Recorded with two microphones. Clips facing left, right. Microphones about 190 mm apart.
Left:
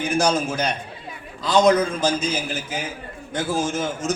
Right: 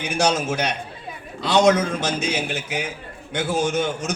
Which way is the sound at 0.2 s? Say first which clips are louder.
Right 2 dB; 70° right (ahead or behind).